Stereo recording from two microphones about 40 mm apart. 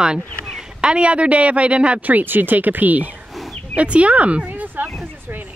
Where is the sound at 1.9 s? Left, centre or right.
Right.